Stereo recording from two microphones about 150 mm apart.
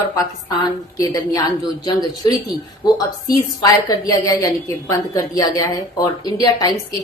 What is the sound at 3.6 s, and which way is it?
A woman's voice, 25° left (ahead or behind).